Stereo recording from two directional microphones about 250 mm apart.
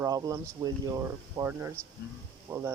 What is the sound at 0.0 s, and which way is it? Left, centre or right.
Speech, centre.